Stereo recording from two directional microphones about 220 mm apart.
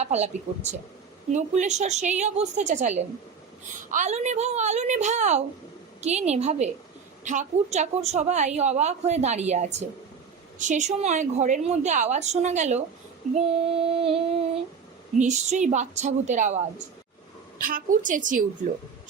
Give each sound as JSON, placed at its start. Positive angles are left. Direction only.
{"t": 0.0, "sound": "a woman's voice", "side_deg": -30}
{"t": 6.0, "sound": "female singing", "side_deg": -30}
{"t": 7.3, "sound": "a woman's voice", "side_deg": -30}
{"t": 13.3, "sound": "female singing", "side_deg": -25}
{"t": 15.2, "sound": "a woman's voice", "side_deg": -30}